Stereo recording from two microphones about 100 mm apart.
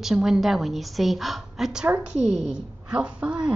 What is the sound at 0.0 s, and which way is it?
A woman's voice, 5° right (ahead or behind).